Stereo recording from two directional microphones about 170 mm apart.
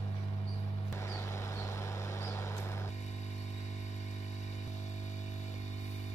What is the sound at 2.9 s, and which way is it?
Vehicle, 40° left (ahead or behind).